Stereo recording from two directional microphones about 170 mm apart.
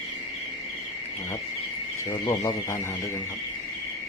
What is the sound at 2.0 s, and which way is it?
Speech, 15° left (ahead or behind).